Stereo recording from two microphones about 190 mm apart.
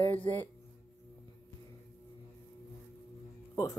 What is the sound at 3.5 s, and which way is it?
Music, 20° left (ahead or behind).